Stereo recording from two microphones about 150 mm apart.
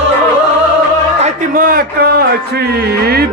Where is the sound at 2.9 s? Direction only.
90° right.